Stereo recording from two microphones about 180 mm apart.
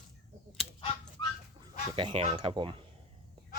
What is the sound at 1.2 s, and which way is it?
Dog, 25° left (ahead or behind).